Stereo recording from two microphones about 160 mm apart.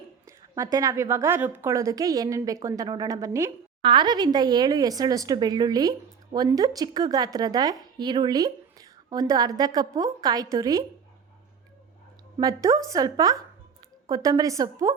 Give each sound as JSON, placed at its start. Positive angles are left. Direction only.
{"t": 0.3, "sound": "a woman's voice", "side_deg": -20}
{"t": 12.4, "sound": "a woman's voice", "side_deg": -20}